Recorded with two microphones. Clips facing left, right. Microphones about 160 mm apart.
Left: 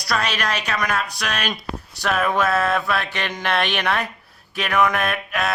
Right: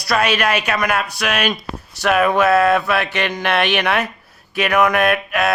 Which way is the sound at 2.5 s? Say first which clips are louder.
Right 6 dB; centre (ahead or behind).